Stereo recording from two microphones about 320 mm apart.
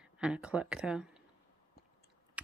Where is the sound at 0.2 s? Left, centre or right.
Centre.